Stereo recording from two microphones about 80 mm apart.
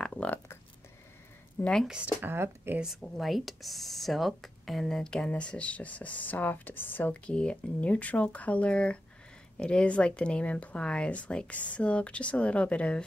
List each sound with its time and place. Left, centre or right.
0.0 s a sound: centre
1.6 s speech: centre
1.9 s speech: centre
2.2 s speech: right
3.2 s speech: centre